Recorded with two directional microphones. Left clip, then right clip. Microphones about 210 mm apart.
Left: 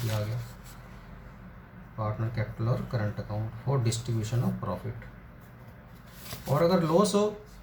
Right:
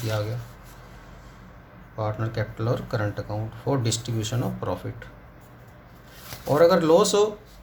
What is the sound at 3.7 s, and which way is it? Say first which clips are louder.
Speech: right 6 dB; 50° right (ahead or behind).